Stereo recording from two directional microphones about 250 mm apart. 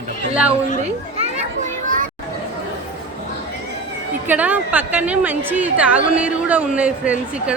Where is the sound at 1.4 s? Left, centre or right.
Right.